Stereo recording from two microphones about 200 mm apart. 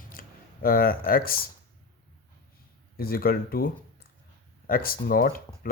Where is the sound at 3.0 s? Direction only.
50° left (ahead or behind).